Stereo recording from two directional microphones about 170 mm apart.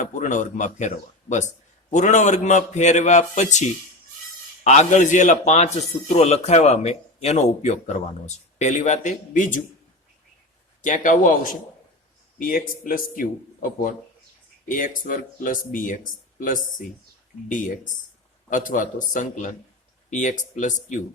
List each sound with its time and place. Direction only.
0.0 s speech: 50° left (ahead or behind)
10.8 s speech: 50° left (ahead or behind)
18.5 s speech: 50° left (ahead or behind)